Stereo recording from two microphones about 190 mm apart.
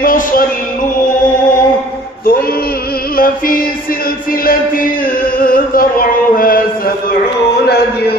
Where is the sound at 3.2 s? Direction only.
50° left (ahead or behind).